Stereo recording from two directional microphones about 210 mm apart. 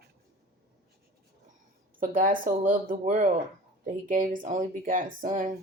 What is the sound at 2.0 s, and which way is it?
Speech, 40° right (ahead or behind).